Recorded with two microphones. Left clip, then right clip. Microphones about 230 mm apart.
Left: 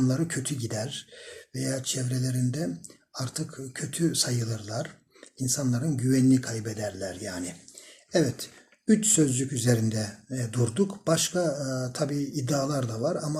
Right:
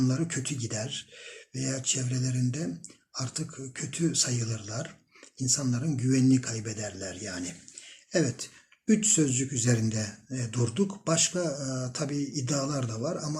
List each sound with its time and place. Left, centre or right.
0.0 s speech: centre
12.1 s speech: left
12.5 s speech: centre